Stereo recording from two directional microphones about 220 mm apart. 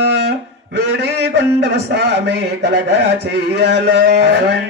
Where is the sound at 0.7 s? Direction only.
50° right (ahead or behind).